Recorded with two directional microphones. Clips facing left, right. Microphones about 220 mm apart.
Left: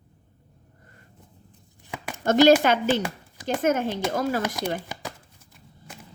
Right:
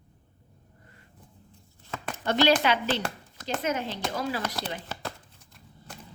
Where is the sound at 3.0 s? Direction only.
10° left (ahead or behind).